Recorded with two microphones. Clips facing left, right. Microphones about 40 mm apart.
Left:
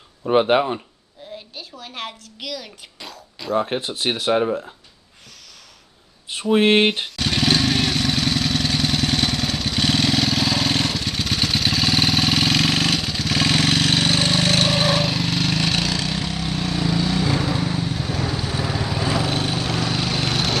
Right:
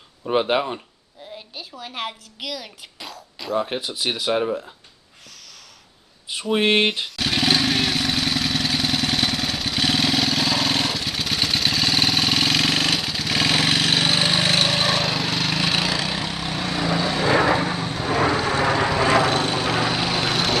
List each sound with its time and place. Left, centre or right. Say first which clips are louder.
0.2 s speech: left 4 dB; centre
1.5 s speech: right 1 dB; centre
3.8 s speech: left 2 dB; centre
6.3 s a sound: left 3 dB; centre
7.2 s vehicle: right 1 dB; centre; by 17.2 s right
17.2 s lawn mower: right 4 dB; right
17.8 s vehicle: right 1 dB; centre
18.1 s vehicle: right 10 dB; right
19.3 s lawn mower: right 2 dB; centre